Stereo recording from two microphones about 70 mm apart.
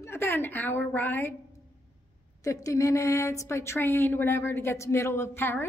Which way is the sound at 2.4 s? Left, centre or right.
Left.